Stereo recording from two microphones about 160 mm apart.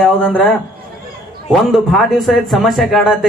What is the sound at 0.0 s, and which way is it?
A man's voice, 5° left (ahead or behind).